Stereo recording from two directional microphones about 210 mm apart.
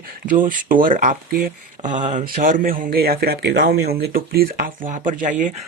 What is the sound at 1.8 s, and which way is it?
Speech, 20° right (ahead or behind).